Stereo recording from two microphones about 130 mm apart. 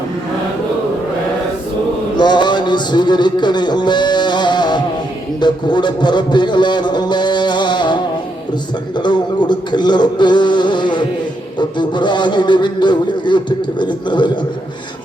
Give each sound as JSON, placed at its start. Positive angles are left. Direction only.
{"t": 2.1, "sound": "music", "side_deg": 35}
{"t": 5.4, "sound": "a man's voice", "side_deg": 35}